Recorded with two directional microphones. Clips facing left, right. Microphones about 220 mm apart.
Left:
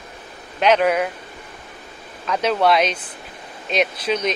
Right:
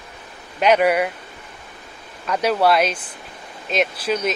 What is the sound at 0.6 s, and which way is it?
Speech, 10° right (ahead or behind).